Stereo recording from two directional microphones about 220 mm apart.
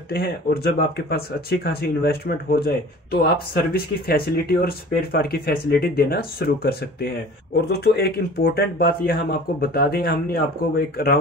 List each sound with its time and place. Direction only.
0.1 s speech: 45° left (ahead or behind)